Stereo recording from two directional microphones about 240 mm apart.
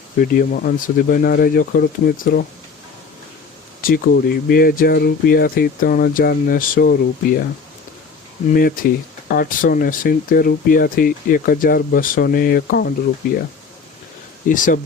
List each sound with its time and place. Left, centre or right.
0.2 s speech: left
3.8 s speech: left
8.4 s speech: left
14.4 s speech: left